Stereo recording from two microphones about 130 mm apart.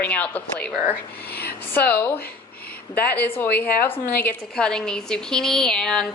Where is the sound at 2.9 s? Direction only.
10° left (ahead or behind).